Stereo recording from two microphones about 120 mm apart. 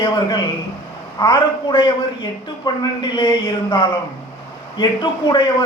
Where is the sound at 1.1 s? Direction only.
35° left (ahead or behind).